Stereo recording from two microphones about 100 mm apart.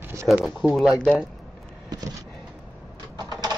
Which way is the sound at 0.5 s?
Centre (ahead or behind).